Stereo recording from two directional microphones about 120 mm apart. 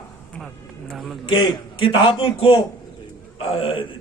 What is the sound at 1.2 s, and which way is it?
A man's voice, 50° left (ahead or behind).